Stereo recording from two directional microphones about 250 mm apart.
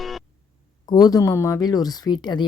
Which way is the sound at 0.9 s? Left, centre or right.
Centre.